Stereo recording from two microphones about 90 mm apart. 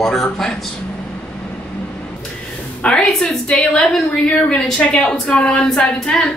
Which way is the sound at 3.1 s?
5° left (ahead or behind).